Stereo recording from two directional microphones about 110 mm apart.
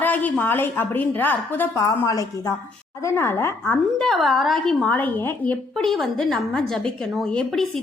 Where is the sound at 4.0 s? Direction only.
Centre (ahead or behind).